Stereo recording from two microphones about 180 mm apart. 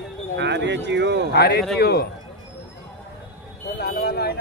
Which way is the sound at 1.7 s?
60° left (ahead or behind).